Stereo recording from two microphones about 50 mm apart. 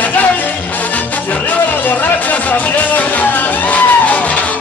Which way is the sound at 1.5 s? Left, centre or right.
Left.